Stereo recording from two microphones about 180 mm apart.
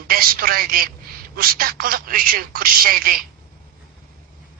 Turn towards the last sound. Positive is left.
turn(degrees=-55)  # may be behind; listen again after turning